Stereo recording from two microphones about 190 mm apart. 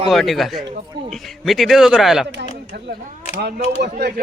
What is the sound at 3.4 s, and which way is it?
Speech, 60° right (ahead or behind).